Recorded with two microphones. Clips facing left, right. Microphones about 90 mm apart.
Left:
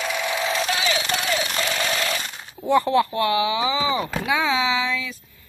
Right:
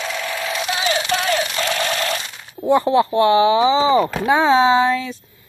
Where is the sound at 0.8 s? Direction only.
40° right (ahead or behind).